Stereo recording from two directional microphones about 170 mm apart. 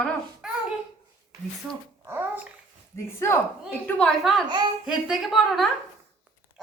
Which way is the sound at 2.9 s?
15° left (ahead or behind).